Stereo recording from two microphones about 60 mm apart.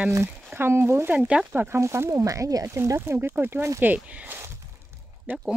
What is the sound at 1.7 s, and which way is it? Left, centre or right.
Speech, right.